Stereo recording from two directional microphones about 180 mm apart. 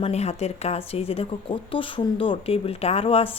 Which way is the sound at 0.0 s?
35° left (ahead or behind).